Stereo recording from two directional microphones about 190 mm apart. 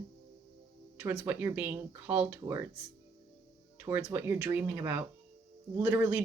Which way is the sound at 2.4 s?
15° right (ahead or behind).